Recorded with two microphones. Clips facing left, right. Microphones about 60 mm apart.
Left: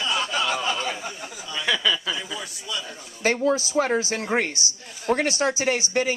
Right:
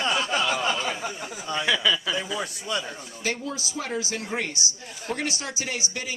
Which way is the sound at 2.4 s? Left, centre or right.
Right.